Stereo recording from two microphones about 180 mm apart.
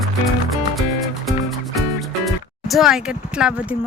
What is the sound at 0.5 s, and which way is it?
Music, centre (ahead or behind).